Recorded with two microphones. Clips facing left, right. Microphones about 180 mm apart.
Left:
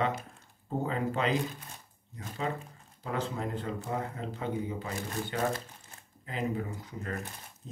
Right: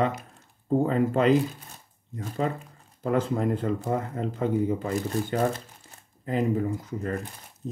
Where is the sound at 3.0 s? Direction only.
50° right (ahead or behind).